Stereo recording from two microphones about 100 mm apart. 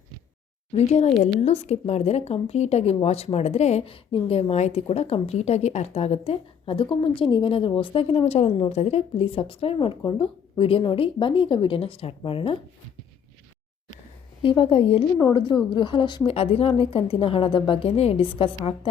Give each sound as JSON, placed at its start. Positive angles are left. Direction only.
{"t": 0.7, "sound": "a woman's voice", "side_deg": 90}
{"t": 6.8, "sound": "a woman's voice", "side_deg": 60}
{"t": 7.8, "sound": "a woman's voice", "side_deg": 70}
{"t": 9.7, "sound": "a woman's voice", "side_deg": 60}
{"t": 14.4, "sound": "a woman's voice", "side_deg": 60}
{"t": 15.2, "sound": "a woman's voice", "side_deg": 50}
{"t": 16.2, "sound": "a woman's voice", "side_deg": 80}